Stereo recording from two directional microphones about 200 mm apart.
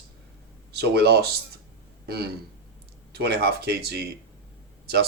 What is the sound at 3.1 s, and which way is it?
Speech, 55° right (ahead or behind).